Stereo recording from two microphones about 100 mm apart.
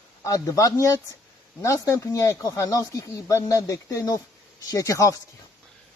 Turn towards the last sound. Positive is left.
turn(degrees=30)  # may be behind; listen again after turning